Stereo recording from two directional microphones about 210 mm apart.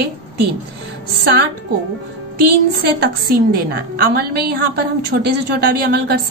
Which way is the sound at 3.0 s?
45° right (ahead or behind).